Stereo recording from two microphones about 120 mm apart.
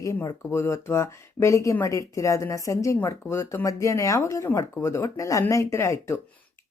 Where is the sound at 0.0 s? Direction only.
25° left (ahead or behind).